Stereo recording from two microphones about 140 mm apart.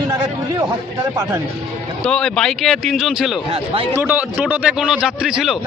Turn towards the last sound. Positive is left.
turn(degrees=-5)  # may be behind; listen again after turning